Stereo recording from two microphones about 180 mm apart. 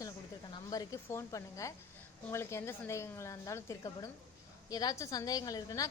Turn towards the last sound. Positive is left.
turn(degrees=20)  # may be behind; listen again after turning